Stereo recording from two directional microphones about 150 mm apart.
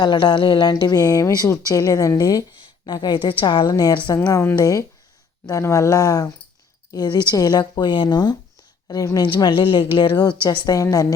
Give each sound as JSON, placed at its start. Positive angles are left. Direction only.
{"t": 0.0, "sound": "speech", "side_deg": 30}